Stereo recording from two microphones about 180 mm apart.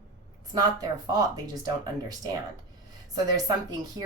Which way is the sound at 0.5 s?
20° right (ahead or behind).